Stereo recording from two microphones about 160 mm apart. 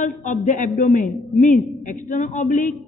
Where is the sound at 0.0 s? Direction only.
55° left (ahead or behind).